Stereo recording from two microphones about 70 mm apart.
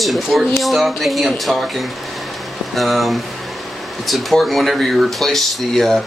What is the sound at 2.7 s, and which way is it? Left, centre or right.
Speech, centre.